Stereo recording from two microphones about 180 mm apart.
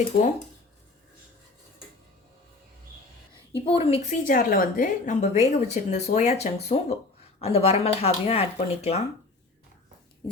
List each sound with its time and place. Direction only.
3.7 s a woman's voice: 35° left (ahead or behind)
4.3 s a woman's voice: 50° left (ahead or behind); by 9.0 s 35° left (ahead or behind)